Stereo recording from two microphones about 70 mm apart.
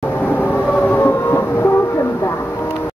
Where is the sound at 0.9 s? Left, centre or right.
Left.